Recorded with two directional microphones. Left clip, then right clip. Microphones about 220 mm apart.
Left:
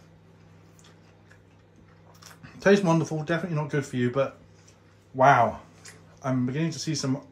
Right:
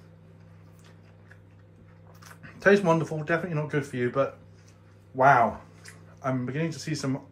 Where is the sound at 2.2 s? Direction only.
30° left (ahead or behind).